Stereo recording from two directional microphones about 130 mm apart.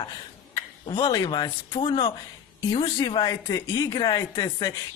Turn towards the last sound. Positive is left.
turn(degrees=25)  # may be behind; listen again after turning